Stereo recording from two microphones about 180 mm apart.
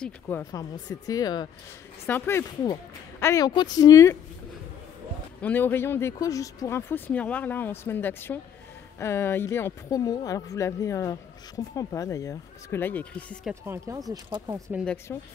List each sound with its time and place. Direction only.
0.0 s speech: 10° left (ahead or behind)
2.0 s speech: 10° left (ahead or behind)
5.4 s speech: 10° left (ahead or behind)
13.5 s speech: 15° right (ahead or behind)
15.1 s speech: 10° left (ahead or behind)